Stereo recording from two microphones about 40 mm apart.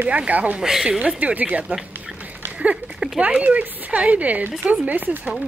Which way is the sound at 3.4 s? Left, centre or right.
Right.